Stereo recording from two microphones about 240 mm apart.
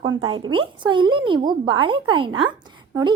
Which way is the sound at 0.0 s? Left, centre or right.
Centre.